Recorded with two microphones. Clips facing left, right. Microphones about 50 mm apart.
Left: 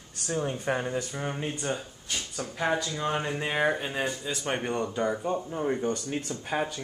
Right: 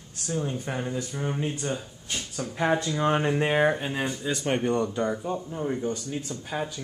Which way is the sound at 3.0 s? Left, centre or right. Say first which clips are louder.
Right 6 dB; centre.